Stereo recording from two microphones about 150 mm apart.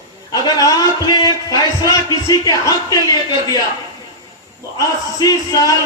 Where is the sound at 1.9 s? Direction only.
25° left (ahead or behind).